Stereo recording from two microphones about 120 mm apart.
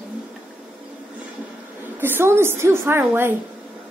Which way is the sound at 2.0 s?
20° right (ahead or behind).